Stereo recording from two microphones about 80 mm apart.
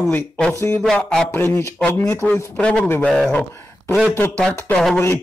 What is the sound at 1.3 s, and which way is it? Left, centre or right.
Speech, left.